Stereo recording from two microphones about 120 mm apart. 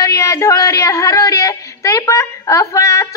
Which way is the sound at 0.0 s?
25° left (ahead or behind).